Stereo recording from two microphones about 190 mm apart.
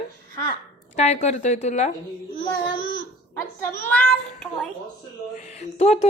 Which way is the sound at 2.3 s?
90° left.